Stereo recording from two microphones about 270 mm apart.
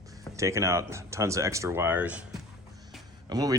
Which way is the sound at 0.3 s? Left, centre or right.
Centre.